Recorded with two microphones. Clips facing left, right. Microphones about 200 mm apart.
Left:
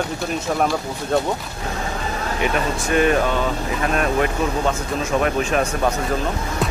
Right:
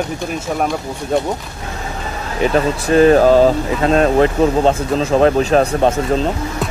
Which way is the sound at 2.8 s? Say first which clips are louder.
Right 9 dB; 35° right (ahead or behind).